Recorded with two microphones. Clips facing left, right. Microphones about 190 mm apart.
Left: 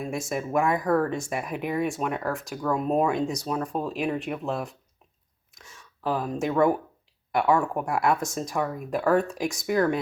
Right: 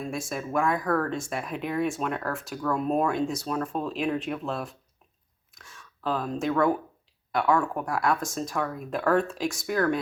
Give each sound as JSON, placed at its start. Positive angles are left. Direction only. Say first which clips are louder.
{"t": 0.0, "sound": "speech", "louder": "left 2 dB", "side_deg": 20}